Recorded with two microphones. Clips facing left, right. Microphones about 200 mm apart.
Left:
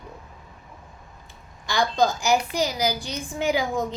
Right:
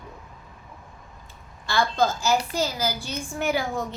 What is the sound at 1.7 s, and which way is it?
A woman's voice, 15° left (ahead or behind).